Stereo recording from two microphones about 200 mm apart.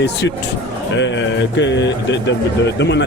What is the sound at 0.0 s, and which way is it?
Speech, 60° left (ahead or behind).